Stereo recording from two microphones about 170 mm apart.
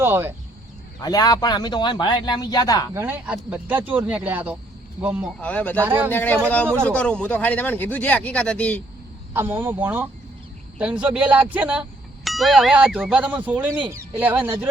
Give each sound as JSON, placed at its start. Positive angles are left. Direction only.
{"t": 0.0, "sound": "speech", "side_deg": -10}
{"t": 0.9, "sound": "speech", "side_deg": 20}
{"t": 2.9, "sound": "speech", "side_deg": -15}
{"t": 5.4, "sound": "speech", "side_deg": 10}
{"t": 5.8, "sound": "speech", "side_deg": -10}
{"t": 6.1, "sound": "speech", "side_deg": 10}
{"t": 9.3, "sound": "speech", "side_deg": -10}